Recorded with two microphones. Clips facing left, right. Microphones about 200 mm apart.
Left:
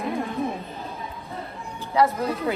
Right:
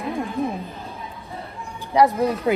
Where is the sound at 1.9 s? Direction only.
15° right (ahead or behind).